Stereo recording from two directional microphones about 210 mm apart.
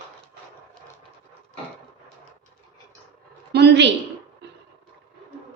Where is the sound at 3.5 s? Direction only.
55° right (ahead or behind).